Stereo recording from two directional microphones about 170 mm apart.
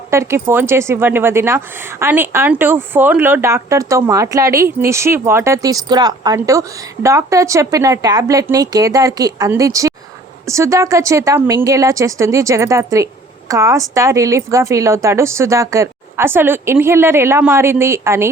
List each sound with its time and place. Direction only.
0.1 s a woman's voice: 15° right (ahead or behind)